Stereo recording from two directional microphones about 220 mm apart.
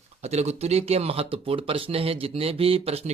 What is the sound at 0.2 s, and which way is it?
Speech, 30° right (ahead or behind).